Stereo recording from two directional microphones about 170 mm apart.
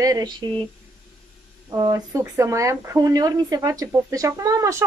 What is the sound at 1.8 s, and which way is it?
Speech, 20° right (ahead or behind).